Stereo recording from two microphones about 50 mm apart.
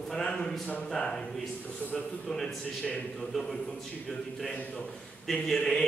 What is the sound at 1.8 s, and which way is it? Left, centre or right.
Speech, left.